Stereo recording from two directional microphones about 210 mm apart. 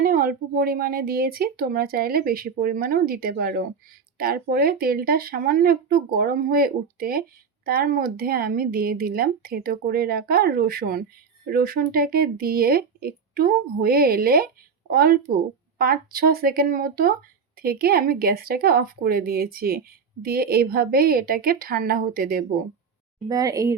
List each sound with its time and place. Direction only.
0.0 s speech: 45° right (ahead or behind)
23.3 s speech: 15° right (ahead or behind)